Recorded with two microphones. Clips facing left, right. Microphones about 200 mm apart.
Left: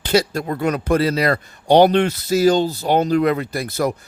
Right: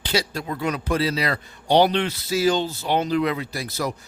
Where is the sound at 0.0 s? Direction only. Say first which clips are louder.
Left 7 dB; 50° left (ahead or behind).